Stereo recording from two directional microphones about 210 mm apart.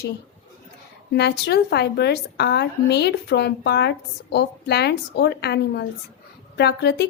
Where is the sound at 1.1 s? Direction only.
50° left (ahead or behind).